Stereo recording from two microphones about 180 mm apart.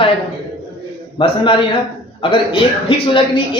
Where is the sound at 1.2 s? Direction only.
30° left (ahead or behind).